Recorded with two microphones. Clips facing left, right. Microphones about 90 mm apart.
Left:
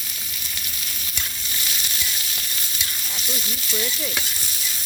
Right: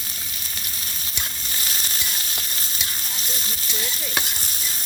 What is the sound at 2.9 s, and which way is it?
Stir, 35° right (ahead or behind).